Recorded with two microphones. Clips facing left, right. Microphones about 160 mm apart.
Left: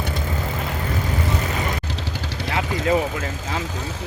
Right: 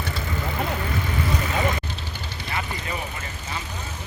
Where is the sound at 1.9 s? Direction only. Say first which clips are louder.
Left 5 dB; 90° left.